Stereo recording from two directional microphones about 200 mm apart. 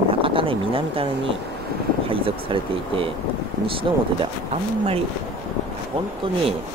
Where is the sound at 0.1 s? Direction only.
25° right (ahead or behind).